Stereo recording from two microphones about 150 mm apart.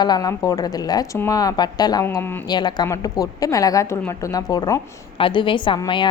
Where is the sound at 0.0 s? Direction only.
25° left (ahead or behind).